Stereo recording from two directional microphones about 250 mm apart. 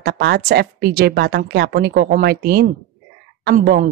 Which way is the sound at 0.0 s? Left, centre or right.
Right.